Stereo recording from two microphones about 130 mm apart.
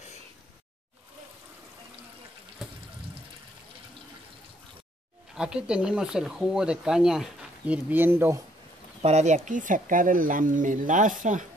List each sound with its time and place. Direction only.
5.3 s speech: 5° right (ahead or behind)
9.0 s speech: 60° right (ahead or behind); by 11.4 s 80° right